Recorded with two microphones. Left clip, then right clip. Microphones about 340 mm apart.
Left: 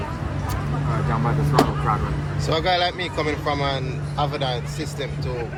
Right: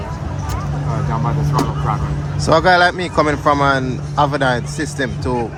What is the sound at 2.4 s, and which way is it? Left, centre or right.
Speech, right.